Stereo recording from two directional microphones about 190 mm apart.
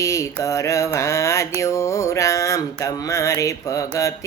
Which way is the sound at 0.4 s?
15° left (ahead or behind).